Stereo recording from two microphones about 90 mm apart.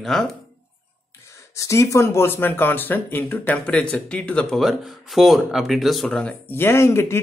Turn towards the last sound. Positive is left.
turn(degrees=30)  # may be behind; listen again after turning